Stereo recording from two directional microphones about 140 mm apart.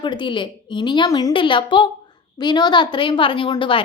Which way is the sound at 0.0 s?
35° left (ahead or behind).